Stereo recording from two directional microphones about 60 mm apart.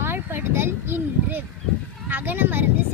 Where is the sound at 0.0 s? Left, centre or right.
Right.